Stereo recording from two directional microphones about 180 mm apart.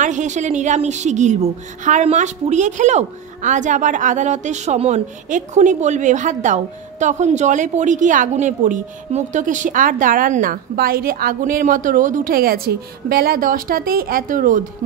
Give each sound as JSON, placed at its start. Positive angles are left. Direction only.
{"t": 0.0, "sound": "a woman's voice", "side_deg": -45}